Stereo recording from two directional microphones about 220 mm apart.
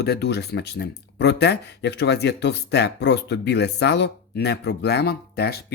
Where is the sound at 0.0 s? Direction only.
45° left (ahead or behind).